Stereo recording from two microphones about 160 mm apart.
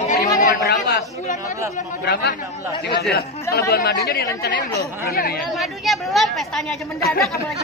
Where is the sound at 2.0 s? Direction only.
90° left.